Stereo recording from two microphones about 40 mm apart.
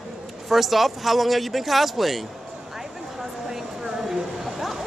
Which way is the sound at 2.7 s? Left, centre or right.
Centre.